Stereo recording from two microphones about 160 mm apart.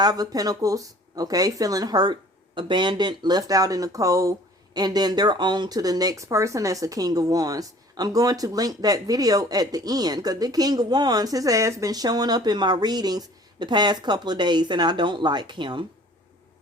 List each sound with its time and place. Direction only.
0.0 s speech: 25° right (ahead or behind)